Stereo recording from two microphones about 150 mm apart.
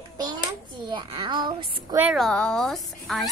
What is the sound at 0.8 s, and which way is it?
A child's voice, 30° right (ahead or behind).